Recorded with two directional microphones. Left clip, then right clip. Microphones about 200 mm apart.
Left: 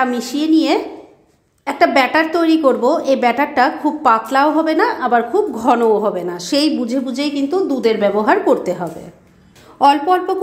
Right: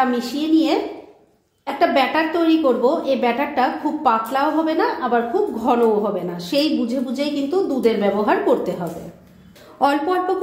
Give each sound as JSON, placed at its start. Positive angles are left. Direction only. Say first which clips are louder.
{"t": 0.0, "sound": "a woman's voice", "louder": "left 2 dB", "side_deg": 45}
{"t": 9.8, "sound": "speech", "louder": "left 6 dB", "side_deg": 30}